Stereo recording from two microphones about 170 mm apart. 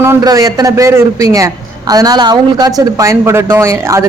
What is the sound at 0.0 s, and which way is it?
Speech, 20° right (ahead or behind).